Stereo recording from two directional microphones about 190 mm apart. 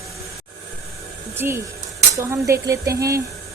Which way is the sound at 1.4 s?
10° right (ahead or behind).